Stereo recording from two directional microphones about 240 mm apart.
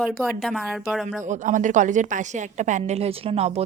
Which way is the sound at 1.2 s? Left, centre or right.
Right.